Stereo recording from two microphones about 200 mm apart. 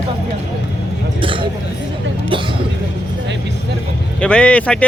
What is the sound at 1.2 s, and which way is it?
Vehicle, 25° right (ahead or behind).